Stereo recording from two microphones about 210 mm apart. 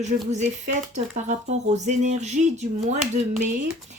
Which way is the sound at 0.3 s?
35° right (ahead or behind).